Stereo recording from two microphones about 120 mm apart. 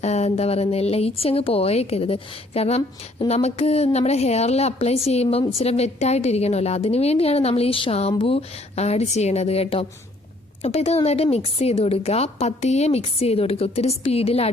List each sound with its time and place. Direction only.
0.0 s a woman's voice: 65° left (ahead or behind)